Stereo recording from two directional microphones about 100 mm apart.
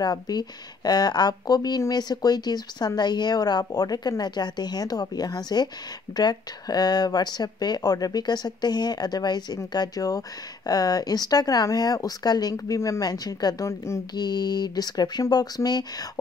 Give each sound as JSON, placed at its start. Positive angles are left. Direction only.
{"t": 0.0, "sound": "a woman's voice", "side_deg": 45}
{"t": 14.1, "sound": "speech", "side_deg": 45}